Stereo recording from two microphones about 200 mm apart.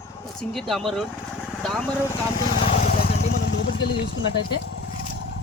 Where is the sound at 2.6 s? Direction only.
35° left (ahead or behind); by 4.9 s 60° left (ahead or behind).